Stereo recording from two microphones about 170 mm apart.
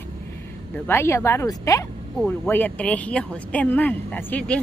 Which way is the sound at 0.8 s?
15° left (ahead or behind).